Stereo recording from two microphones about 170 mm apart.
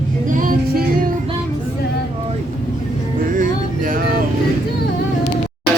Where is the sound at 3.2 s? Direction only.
50° right (ahead or behind).